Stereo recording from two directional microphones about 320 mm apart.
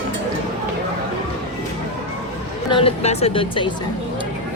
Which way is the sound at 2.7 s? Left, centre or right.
Centre.